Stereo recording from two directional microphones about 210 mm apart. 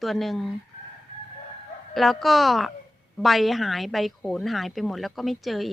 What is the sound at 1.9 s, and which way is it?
Speech, centre (ahead or behind).